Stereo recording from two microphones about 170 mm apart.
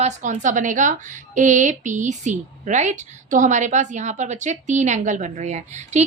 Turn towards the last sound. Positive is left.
turn(degrees=-45)  # may be behind; listen again after turning